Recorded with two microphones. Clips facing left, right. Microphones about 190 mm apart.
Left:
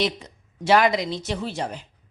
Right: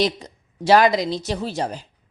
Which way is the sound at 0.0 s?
35° right (ahead or behind).